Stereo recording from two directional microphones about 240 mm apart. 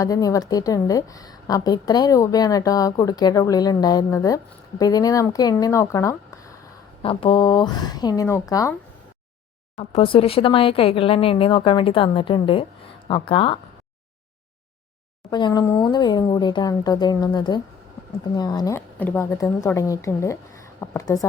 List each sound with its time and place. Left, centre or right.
0.0 s a woman's voice: centre
9.7 s speech: left
15.3 s a woman's voice: centre